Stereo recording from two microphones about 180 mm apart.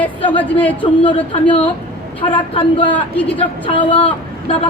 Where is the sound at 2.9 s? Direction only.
10° left (ahead or behind).